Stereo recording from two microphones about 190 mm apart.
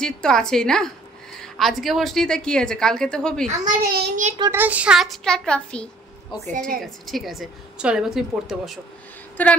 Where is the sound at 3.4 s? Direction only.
45° right (ahead or behind).